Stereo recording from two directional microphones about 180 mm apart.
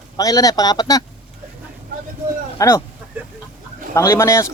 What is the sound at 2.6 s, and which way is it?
Speech, 15° left (ahead or behind).